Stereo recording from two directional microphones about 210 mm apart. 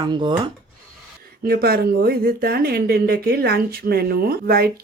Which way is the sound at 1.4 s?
45° right (ahead or behind).